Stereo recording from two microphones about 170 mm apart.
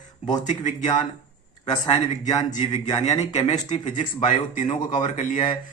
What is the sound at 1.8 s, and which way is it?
Speech, 25° left (ahead or behind).